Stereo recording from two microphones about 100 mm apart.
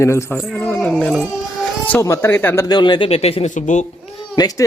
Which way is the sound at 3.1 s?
80° left.